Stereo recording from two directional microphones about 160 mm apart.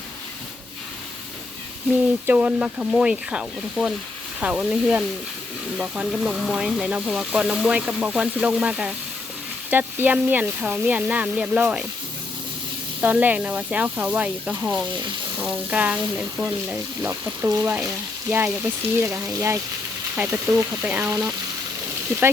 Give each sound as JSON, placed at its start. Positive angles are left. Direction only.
{"t": 2.2, "sound": "speech", "side_deg": -10}
{"t": 13.0, "sound": "speech", "side_deg": -10}